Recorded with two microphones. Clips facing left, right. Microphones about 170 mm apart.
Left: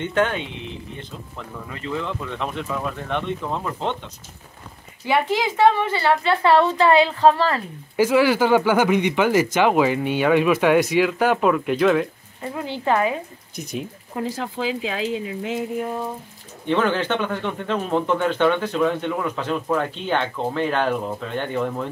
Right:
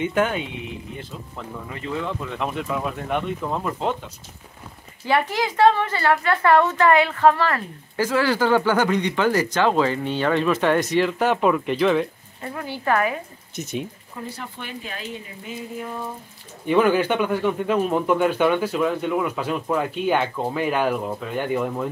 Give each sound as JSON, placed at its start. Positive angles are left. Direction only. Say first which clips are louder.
{"t": 0.0, "sound": "speech", "louder": "even", "side_deg": -10}
{"t": 1.4, "sound": "speech", "louder": "even", "side_deg": -10}
{"t": 5.0, "sound": "a woman's voice", "louder": "left 1 dB", "side_deg": 20}
{"t": 7.9, "sound": "speech", "louder": "left 4 dB", "side_deg": 15}
{"t": 12.4, "sound": "a woman's voice", "louder": "left 2 dB", "side_deg": 20}
{"t": 13.6, "sound": "speech", "louder": "right 1 dB", "side_deg": 0}
{"t": 14.1, "sound": "speech", "louder": "left 9 dB", "side_deg": 90}
{"t": 16.6, "sound": "speech", "louder": "right 3 dB", "side_deg": -10}